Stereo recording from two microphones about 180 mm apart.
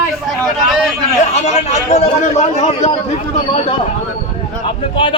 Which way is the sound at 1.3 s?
40° left (ahead or behind).